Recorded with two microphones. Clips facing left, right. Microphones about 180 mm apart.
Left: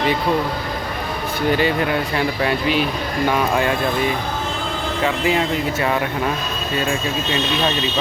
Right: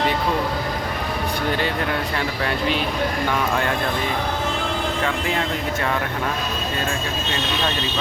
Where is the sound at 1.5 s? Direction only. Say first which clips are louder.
Left 5 dB; 5° left (ahead or behind).